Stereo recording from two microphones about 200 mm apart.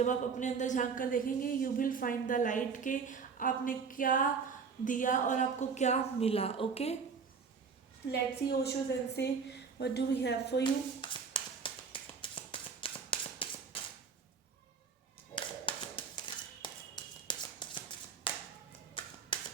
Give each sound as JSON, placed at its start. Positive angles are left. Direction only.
{"t": 0.0, "sound": "speech", "side_deg": 40}
{"t": 8.1, "sound": "a woman's voice", "side_deg": 55}
{"t": 10.6, "sound": "tap", "side_deg": 25}
{"t": 15.4, "sound": "tap", "side_deg": 25}
{"t": 19.3, "sound": "whip", "side_deg": 25}